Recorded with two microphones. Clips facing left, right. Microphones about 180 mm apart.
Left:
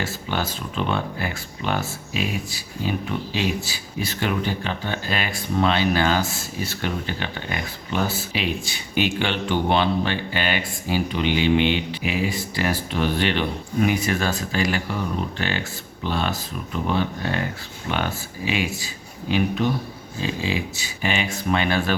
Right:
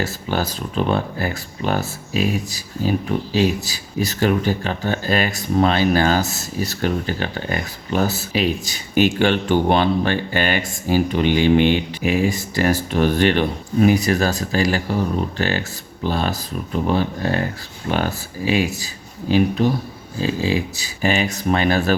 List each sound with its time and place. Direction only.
0.0 s speech: 40° right (ahead or behind)